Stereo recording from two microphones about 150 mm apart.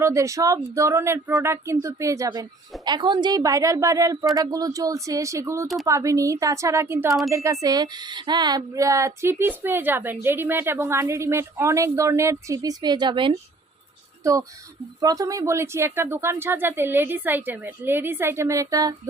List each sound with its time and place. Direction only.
0.0 s speech: 20° right (ahead or behind)
15.0 s speech: 25° right (ahead or behind)